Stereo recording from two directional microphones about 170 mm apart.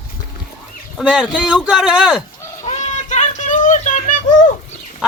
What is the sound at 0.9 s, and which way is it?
Speech, centre (ahead or behind).